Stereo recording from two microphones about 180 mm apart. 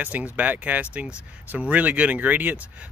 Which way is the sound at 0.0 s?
10° right (ahead or behind).